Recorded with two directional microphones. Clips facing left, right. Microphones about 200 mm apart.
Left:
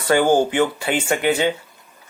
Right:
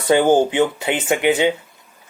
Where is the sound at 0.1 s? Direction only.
20° right (ahead or behind).